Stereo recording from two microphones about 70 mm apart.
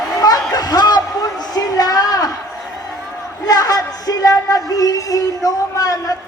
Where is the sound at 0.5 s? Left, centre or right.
Left.